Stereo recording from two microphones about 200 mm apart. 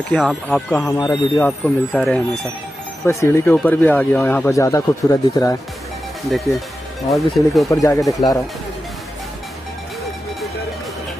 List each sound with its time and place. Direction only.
0.1 s speech: centre (ahead or behind)
0.7 s speech: 15° left (ahead or behind)
3.1 s speech: 15° left (ahead or behind)
6.3 s speech: centre (ahead or behind)
7.7 s speech: 15° left (ahead or behind)